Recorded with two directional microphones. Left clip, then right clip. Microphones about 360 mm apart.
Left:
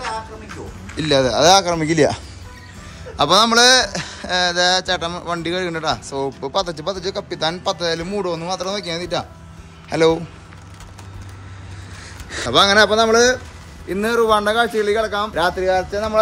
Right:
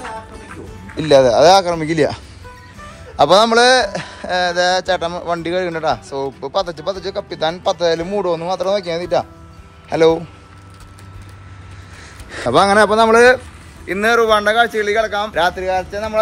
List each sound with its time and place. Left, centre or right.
0.9 s a man's voice: centre
12.4 s speech: centre
14.2 s a man's voice: centre